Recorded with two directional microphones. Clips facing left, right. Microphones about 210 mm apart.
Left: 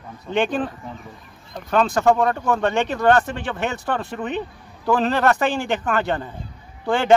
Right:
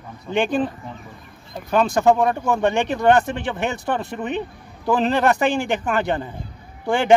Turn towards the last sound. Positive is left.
turn(degrees=-15)  # may be behind; listen again after turning